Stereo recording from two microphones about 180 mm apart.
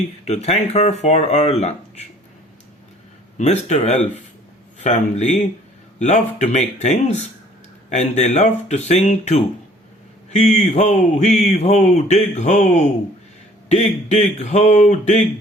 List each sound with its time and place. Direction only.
0.3 s speech: 35° left (ahead or behind)
3.3 s speech: 40° left (ahead or behind)